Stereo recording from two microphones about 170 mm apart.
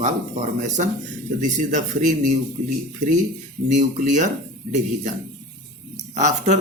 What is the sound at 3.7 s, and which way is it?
Speech, 45° right (ahead or behind).